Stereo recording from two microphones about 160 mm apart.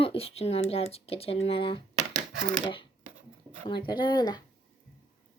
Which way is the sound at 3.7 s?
30° left (ahead or behind).